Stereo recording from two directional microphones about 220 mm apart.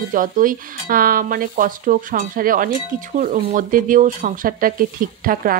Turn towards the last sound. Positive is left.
turn(degrees=-40)  # may be behind; listen again after turning